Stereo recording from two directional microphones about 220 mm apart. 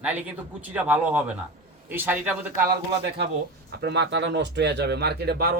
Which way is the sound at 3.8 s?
50° right (ahead or behind).